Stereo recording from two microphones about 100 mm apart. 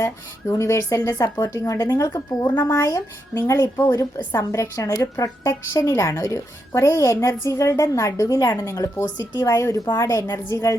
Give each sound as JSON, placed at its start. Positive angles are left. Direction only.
{"t": 0.0, "sound": "a woman's voice", "side_deg": 30}